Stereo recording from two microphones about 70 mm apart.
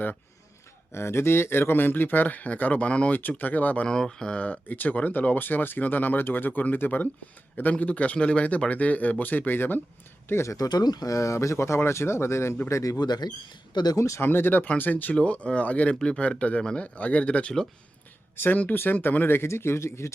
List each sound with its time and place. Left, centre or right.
0.9 s speech: left
3.8 s speech: centre; by 9.8 s left
10.2 s speech: left
10.7 s speech: left
13.0 s speech: left
13.9 s speech: left
14.2 s speech: left